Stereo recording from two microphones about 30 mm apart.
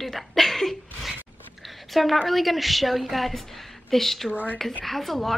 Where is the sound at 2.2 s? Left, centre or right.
Centre.